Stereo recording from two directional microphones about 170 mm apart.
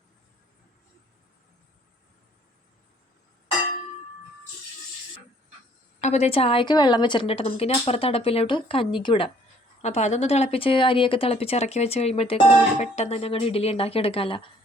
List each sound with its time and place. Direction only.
6.0 s a woman's voice: 40° left (ahead or behind)
9.8 s a woman's voice: 40° left (ahead or behind)